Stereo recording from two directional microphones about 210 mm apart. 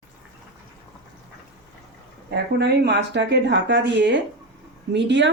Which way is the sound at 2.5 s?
50° right (ahead or behind).